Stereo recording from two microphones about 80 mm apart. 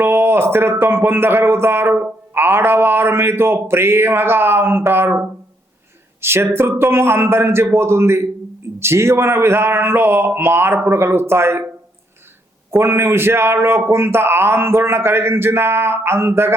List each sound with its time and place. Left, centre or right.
0.0 s speech: right
6.2 s a man's voice: right
12.7 s a man's voice: right